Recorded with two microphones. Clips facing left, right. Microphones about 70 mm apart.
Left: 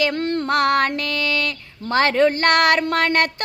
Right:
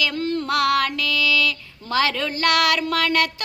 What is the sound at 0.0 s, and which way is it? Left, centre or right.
Child singing, left.